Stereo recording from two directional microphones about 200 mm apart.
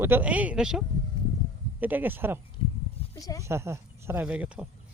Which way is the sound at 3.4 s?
15° right (ahead or behind).